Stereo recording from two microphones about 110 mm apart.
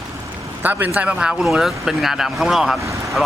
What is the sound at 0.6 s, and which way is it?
A man's voice, 15° right (ahead or behind).